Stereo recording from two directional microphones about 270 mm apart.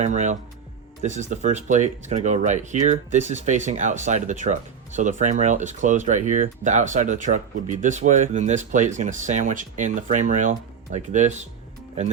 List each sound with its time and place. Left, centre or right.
0.0 s speech: right